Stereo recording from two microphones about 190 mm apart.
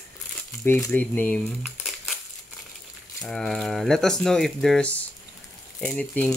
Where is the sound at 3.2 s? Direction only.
Centre (ahead or behind).